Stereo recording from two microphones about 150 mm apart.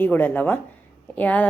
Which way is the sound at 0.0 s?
10° left (ahead or behind).